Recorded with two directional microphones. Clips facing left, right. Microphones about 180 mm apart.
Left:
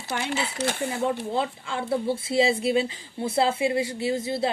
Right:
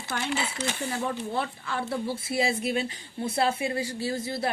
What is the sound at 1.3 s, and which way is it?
Speech, 20° left (ahead or behind).